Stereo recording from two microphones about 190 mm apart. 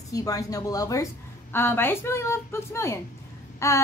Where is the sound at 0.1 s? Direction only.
15° left (ahead or behind).